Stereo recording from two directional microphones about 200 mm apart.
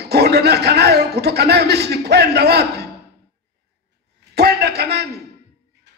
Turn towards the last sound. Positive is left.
turn(degrees=-55)  # may be behind; listen again after turning